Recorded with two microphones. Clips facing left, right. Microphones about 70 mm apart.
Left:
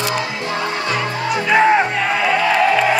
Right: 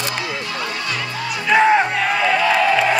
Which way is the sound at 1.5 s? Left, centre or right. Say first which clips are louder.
Even; centre.